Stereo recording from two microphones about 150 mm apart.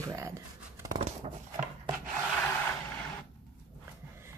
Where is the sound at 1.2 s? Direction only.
45° right (ahead or behind).